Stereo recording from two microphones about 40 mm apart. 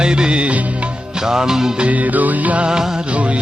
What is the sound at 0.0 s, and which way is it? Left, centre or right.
Music, right.